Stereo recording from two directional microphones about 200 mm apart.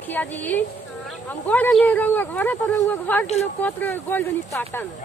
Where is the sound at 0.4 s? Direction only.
10° left (ahead or behind).